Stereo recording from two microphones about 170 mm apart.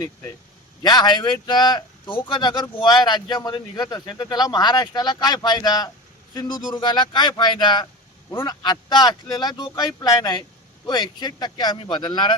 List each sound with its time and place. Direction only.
0.8 s speech: 25° left (ahead or behind)